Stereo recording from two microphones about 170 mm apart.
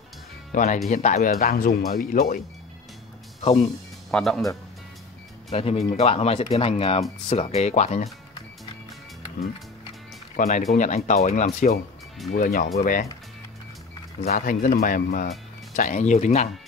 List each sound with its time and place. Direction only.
0.5 s speech: 50° left (ahead or behind)
3.3 s speech: 35° left (ahead or behind)
4.1 s speech: centre (ahead or behind)
5.5 s speech: 35° left (ahead or behind)
10.3 s speech: 50° left (ahead or behind)
14.2 s speech: 55° left (ahead or behind)